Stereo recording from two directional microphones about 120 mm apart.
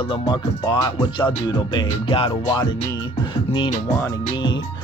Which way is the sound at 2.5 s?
35° left (ahead or behind).